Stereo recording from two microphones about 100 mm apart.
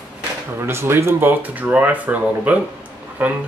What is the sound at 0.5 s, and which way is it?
Speech, 25° right (ahead or behind).